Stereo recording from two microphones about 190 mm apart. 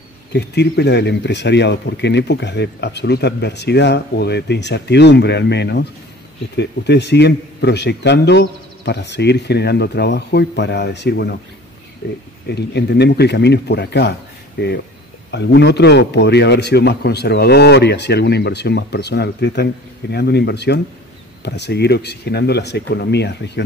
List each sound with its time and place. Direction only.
0.3 s speech: 60° left (ahead or behind)